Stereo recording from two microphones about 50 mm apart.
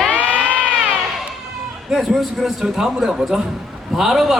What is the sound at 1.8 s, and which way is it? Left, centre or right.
A man's voice, centre.